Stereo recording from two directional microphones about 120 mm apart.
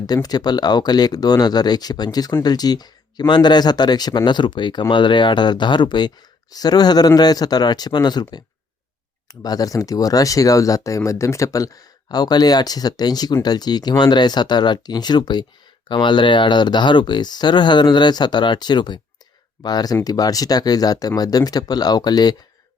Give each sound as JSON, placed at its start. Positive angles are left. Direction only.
{"t": 0.1, "sound": "speech", "side_deg": 35}
{"t": 9.4, "sound": "speech", "side_deg": 30}